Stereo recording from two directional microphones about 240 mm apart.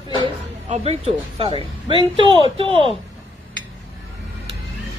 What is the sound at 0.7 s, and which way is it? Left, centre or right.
Speech, right.